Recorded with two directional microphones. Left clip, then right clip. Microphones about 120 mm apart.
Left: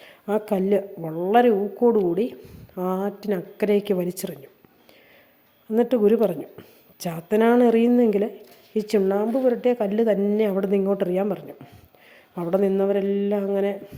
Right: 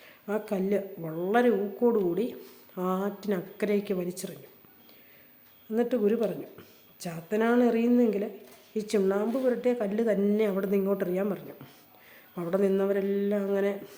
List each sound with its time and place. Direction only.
0.0 s a woman's voice: 50° left (ahead or behind)
1.1 s a woman's voice: 30° left (ahead or behind); by 4.4 s 55° left (ahead or behind)
5.7 s a woman's voice: 50° left (ahead or behind); by 13.7 s 30° left (ahead or behind)